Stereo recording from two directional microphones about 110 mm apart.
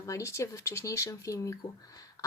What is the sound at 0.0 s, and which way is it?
Speech, 30° left (ahead or behind).